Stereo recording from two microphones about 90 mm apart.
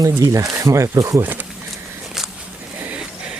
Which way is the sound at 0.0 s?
40° right (ahead or behind).